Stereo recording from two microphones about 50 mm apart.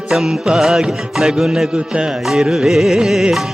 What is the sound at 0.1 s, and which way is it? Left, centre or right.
Music, centre.